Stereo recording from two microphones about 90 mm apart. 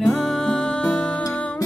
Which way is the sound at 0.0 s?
5° left (ahead or behind).